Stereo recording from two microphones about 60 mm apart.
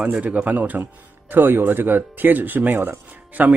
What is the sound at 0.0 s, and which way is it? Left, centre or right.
A man's voice, right.